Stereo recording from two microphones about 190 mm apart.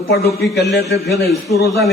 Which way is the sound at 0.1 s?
55° left (ahead or behind).